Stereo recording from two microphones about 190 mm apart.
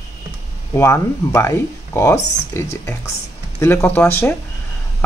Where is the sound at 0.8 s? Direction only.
15° left (ahead or behind).